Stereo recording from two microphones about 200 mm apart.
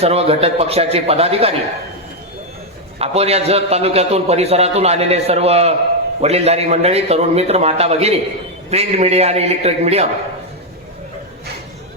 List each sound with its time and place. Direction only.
0.0 s a man's voice: 30° right (ahead or behind)
3.0 s a man's voice: 30° right (ahead or behind)